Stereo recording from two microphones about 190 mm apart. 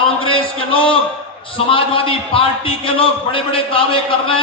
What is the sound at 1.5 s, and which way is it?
A man's voice, 30° left (ahead or behind).